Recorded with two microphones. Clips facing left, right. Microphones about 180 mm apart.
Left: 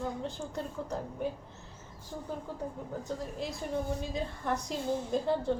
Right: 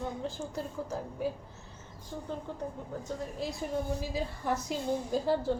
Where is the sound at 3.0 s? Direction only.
Centre (ahead or behind).